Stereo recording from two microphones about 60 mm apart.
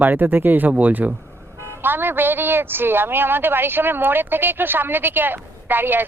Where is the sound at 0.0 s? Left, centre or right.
Right.